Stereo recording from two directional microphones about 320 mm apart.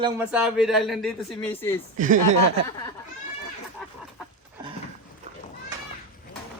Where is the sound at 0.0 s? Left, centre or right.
Centre.